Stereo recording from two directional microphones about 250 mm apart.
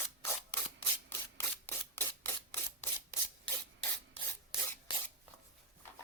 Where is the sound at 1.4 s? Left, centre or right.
Centre.